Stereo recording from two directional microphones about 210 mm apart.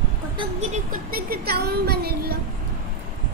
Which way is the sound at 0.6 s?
40° right (ahead or behind).